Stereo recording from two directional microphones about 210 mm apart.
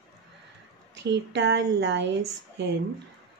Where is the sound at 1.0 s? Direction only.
55° right (ahead or behind).